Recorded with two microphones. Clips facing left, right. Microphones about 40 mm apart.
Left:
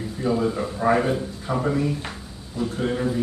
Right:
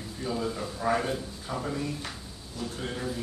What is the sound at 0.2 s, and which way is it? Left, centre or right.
A man's voice, left.